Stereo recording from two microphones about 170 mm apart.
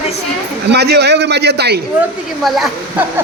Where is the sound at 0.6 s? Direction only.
75° right (ahead or behind).